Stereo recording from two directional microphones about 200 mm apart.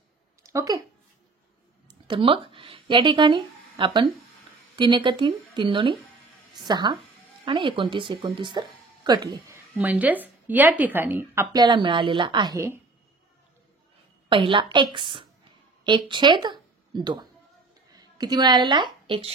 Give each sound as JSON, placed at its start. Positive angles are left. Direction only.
{"t": 0.4, "sound": "speech", "side_deg": -15}
{"t": 1.9, "sound": "speech", "side_deg": -25}
{"t": 9.8, "sound": "a woman's voice", "side_deg": -10}
{"t": 14.3, "sound": "a woman's voice", "side_deg": -25}